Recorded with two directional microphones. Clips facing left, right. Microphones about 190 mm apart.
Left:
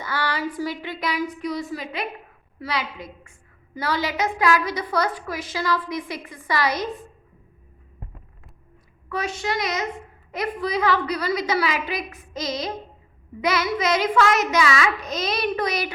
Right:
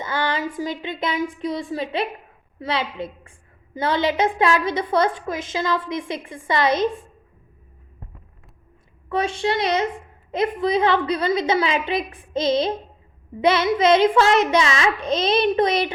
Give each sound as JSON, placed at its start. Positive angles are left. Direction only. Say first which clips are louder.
{"t": 0.0, "sound": "a woman's voice", "louder": "right 2 dB", "side_deg": -20}
{"t": 9.0, "sound": "a woman's voice", "louder": "right 5 dB", "side_deg": -25}